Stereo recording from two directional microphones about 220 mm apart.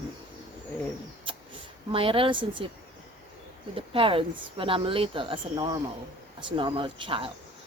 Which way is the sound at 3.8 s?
25° right (ahead or behind).